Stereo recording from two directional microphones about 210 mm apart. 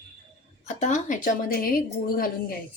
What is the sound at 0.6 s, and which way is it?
Speech, 35° left (ahead or behind).